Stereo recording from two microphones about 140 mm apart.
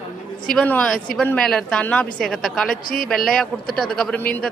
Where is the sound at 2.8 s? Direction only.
85° left.